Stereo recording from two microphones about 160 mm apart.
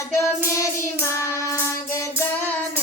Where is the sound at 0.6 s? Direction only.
15° left (ahead or behind).